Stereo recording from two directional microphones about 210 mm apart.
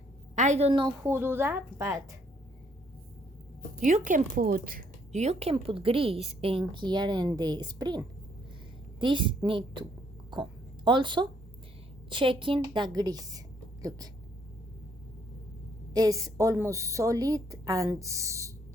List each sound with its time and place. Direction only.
0.3 s a woman's voice: 35° right (ahead or behind); by 2.1 s 15° right (ahead or behind)
3.8 s a woman's voice: 35° right (ahead or behind)
10.8 s a woman's voice: 20° right (ahead or behind)
15.9 s a woman's voice: 15° right (ahead or behind)